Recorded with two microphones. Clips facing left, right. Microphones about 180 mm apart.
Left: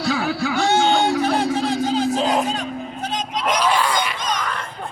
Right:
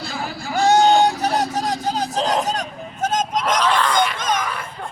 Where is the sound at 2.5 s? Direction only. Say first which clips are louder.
Left 1 dB; 45° right (ahead or behind).